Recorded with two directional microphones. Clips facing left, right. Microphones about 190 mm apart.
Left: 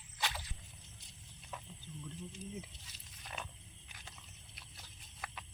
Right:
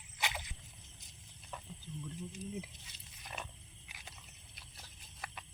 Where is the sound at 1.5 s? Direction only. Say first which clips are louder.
Even; 5° left (ahead or behind).